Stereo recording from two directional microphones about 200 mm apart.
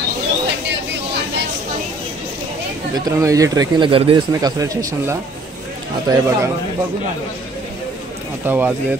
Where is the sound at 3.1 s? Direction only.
15° right (ahead or behind).